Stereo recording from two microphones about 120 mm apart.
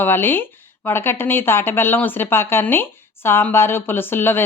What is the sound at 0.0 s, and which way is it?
Speech, 15° left (ahead or behind).